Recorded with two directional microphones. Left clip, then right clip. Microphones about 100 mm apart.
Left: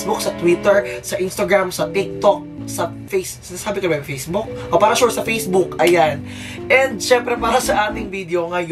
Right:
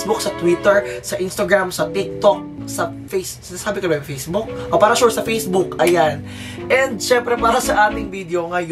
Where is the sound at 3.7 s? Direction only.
15° right (ahead or behind).